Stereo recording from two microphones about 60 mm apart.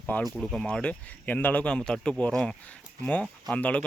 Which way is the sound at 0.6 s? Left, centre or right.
Centre.